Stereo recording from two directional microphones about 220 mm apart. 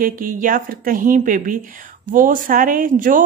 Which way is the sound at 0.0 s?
40° right (ahead or behind).